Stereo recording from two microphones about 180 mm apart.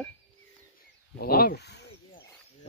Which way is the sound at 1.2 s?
55° left (ahead or behind).